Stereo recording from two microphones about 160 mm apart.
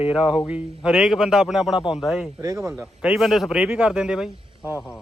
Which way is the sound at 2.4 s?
20° right (ahead or behind).